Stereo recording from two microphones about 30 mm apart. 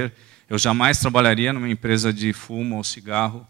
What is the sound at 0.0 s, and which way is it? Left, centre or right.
Speech, left.